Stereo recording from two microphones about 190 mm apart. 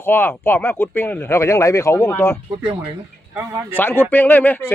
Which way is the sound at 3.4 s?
15° right (ahead or behind).